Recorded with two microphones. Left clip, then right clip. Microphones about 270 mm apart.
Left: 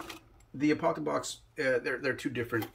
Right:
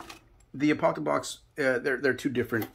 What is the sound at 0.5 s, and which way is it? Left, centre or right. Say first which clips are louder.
Speech: right 3 dB; centre.